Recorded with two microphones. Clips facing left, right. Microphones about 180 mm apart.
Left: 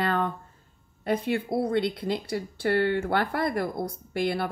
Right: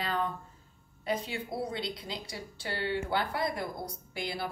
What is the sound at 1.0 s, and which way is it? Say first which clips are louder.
Speech: left 7 dB; 55° left (ahead or behind).